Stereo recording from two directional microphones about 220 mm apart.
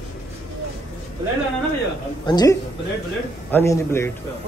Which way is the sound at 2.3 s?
20° left (ahead or behind).